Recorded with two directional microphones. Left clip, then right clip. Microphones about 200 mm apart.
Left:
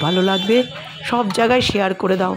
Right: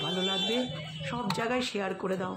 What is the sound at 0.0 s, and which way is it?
Speech, 50° left (ahead or behind).